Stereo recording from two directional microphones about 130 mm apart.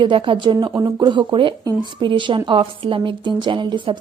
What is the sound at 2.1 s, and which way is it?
Speech, 40° right (ahead or behind).